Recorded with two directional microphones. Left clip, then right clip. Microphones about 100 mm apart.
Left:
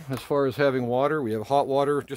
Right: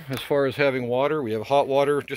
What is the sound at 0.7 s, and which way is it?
Speech, 55° left (ahead or behind).